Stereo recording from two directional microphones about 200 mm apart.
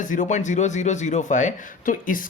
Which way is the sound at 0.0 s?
40° left (ahead or behind).